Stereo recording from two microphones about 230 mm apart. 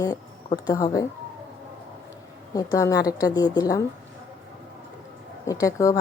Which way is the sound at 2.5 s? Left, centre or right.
Centre.